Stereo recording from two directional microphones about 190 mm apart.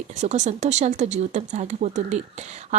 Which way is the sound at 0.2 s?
40° right (ahead or behind).